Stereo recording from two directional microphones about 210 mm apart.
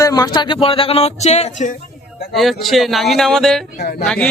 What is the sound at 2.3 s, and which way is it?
Speech, centre (ahead or behind).